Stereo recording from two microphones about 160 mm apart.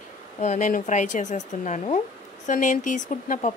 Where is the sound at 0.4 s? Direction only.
50° left (ahead or behind).